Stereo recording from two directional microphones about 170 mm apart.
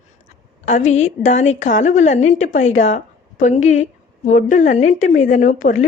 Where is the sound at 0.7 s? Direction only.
45° left (ahead or behind).